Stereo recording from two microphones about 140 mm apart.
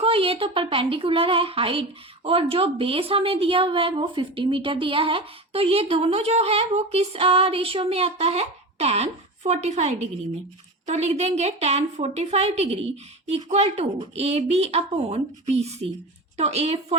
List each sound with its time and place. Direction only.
0.0 s a woman's voice: 40° right (ahead or behind)